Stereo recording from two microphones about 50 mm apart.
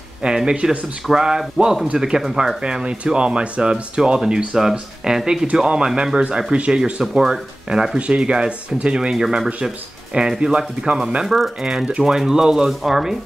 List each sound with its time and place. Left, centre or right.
0.2 s speech: centre
11.2 s speech: centre